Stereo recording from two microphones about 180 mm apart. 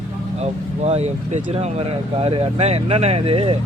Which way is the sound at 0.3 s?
35° right (ahead or behind).